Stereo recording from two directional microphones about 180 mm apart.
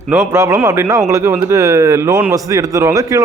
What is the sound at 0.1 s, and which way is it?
A man's voice, 15° right (ahead or behind).